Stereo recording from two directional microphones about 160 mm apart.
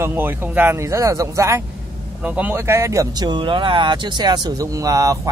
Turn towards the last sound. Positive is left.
turn(degrees=-20)  # may be behind; listen again after turning